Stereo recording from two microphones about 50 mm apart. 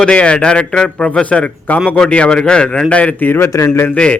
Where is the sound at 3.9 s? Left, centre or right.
Left.